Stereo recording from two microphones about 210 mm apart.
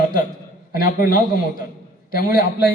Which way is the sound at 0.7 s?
40° left (ahead or behind).